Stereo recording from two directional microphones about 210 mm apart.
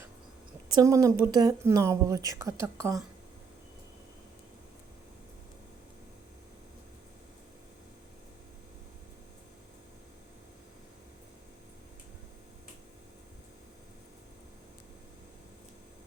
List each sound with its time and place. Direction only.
0.7 s speech: 15° right (ahead or behind)